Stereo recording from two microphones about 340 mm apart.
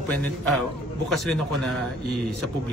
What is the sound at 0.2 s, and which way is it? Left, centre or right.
Speech, centre.